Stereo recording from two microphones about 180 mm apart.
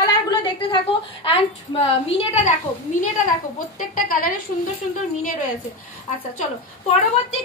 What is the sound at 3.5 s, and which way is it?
Speech, 50° left (ahead or behind).